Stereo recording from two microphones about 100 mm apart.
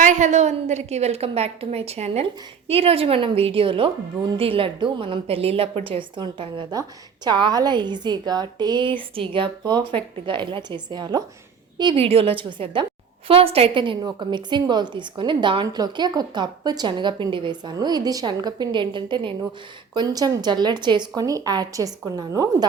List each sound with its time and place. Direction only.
0.8 s a woman's voice: 90° right
2.6 s a woman's voice: 70° right (ahead or behind); by 11.2 s 45° right (ahead or behind)
11.9 s a woman's voice: 75° right (ahead or behind)
12.4 s a woman's voice: 60° right (ahead or behind)
13.2 s a woman's voice: 70° right (ahead or behind); by 15.6 s 50° right (ahead or behind)
15.6 s a woman's voice: 40° right (ahead or behind)
21.2 s a woman's voice: 35° right (ahead or behind)